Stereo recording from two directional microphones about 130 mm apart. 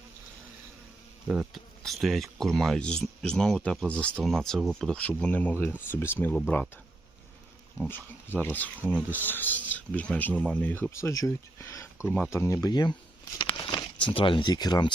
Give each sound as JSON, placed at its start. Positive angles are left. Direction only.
{"t": 1.3, "sound": "speech", "side_deg": -10}
{"t": 7.9, "sound": "speech", "side_deg": 15}
{"t": 12.0, "sound": "speech", "side_deg": 5}
{"t": 12.3, "sound": "speech", "side_deg": 20}
{"t": 12.6, "sound": "speech", "side_deg": 35}